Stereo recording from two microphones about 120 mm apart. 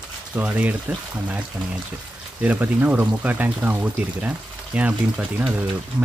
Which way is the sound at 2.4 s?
10° right (ahead or behind).